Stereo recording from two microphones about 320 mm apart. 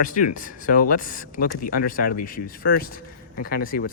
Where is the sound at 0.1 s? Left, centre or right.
Left.